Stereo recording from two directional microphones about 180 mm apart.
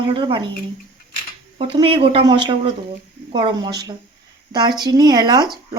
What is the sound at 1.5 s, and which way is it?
Speech, 30° right (ahead or behind).